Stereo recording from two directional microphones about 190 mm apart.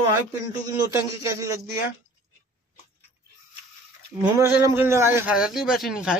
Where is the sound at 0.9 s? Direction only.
15° right (ahead or behind).